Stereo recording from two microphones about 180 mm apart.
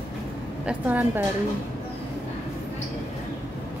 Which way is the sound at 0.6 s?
5° right (ahead or behind).